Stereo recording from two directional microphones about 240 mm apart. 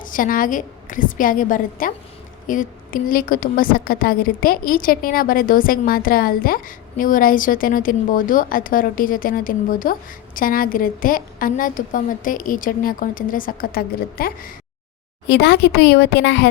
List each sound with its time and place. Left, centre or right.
0.0 s a woman's voice: left